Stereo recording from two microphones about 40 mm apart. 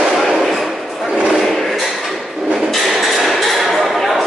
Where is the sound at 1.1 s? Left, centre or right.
Right.